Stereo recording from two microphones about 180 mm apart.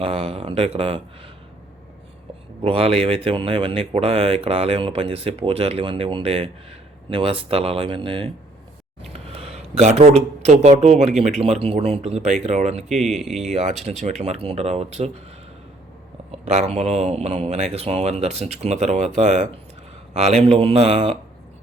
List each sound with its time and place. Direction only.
0.0 s speech: 30° right (ahead or behind)
2.6 s speech: 30° right (ahead or behind)
13.1 s speech: centre (ahead or behind)
13.5 s speech: 40° right (ahead or behind)
16.3 s speech: 35° right (ahead or behind)